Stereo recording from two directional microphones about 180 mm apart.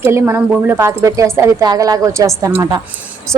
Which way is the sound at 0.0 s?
15° right (ahead or behind).